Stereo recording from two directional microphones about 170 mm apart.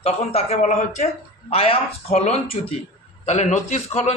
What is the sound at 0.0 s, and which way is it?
A man's voice, 35° left (ahead or behind).